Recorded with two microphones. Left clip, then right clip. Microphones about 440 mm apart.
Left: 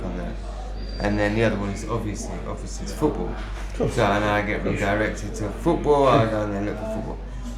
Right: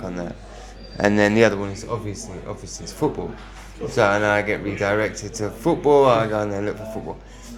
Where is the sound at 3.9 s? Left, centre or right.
Right.